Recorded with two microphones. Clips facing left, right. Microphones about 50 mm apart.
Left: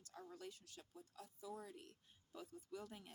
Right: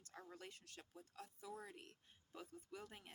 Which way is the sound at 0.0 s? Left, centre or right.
Right.